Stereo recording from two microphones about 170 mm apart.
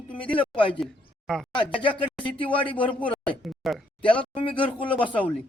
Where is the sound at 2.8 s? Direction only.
30° left (ahead or behind).